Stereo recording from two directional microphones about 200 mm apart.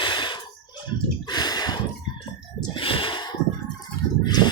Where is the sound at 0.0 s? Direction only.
25° left (ahead or behind).